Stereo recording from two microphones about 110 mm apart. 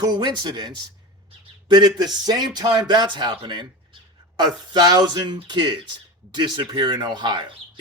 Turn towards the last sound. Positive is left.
turn(degrees=-45)  # may be behind; listen again after turning